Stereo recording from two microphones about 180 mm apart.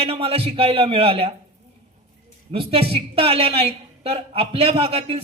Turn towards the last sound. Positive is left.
turn(degrees=-30)  # may be behind; listen again after turning